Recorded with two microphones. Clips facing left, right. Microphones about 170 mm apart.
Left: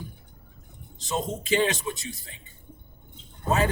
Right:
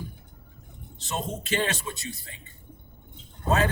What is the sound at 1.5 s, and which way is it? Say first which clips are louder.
Speech: left 5 dB; 15° left (ahead or behind).